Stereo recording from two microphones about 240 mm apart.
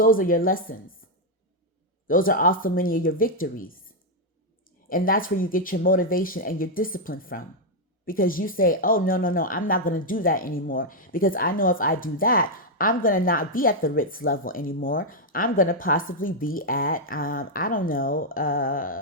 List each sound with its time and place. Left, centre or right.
0.0 s a woman's voice: left
2.0 s a woman's voice: left
4.9 s a woman's voice: left